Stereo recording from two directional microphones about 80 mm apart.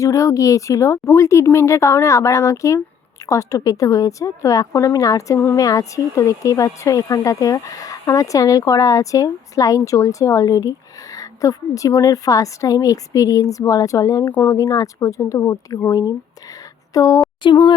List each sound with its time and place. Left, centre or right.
0.0 s speech: left
17.4 s speech: left